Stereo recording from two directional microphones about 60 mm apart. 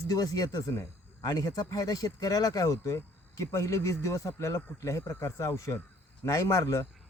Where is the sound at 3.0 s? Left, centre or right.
Left.